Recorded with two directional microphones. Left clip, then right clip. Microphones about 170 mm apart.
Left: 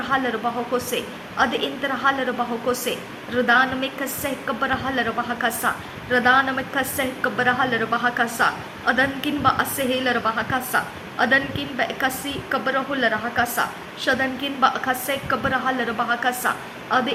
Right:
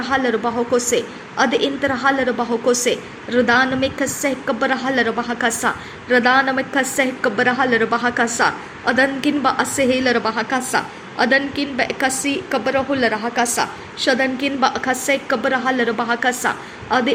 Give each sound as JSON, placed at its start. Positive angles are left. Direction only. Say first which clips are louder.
{"t": 0.0, "sound": "a woman's voice", "louder": "right 4 dB", "side_deg": -30}